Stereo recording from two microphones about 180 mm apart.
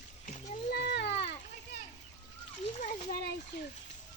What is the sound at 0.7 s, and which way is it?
Speech, 65° left (ahead or behind).